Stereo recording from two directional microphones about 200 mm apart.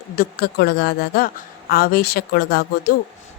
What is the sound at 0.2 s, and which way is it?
A woman's voice, 50° left (ahead or behind).